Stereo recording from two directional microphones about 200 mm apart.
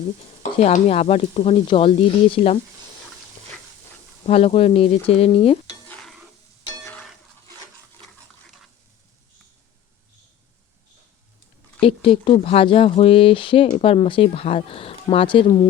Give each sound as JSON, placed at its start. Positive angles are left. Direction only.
{"t": 0.6, "sound": "speech", "side_deg": 30}
{"t": 4.3, "sound": "speech", "side_deg": 30}
{"t": 5.9, "sound": "stir", "side_deg": 0}
{"t": 11.8, "sound": "speech", "side_deg": 25}